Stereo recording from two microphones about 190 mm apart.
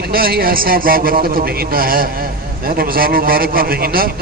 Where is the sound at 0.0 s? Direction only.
50° right (ahead or behind).